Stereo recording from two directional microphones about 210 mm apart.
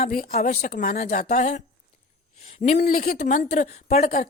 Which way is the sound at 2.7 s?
45° left (ahead or behind).